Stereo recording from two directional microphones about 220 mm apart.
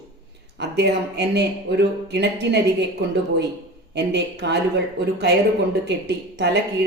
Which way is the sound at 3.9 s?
50° right (ahead or behind).